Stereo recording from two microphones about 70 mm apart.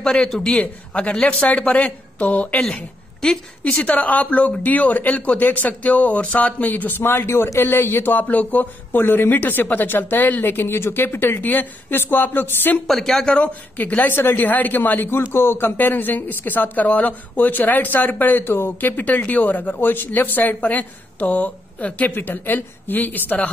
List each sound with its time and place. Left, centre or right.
0.0 s a man's voice: centre
0.6 s speech: centre
2.6 s speech: centre; by 12.8 s left
12.8 s speech: centre
13.3 s speech: left